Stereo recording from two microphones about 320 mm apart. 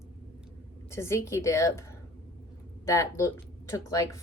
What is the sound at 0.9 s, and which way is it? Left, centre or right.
Speech, centre.